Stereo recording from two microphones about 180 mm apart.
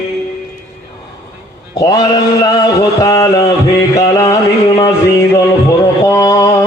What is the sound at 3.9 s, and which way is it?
Music, 15° left (ahead or behind).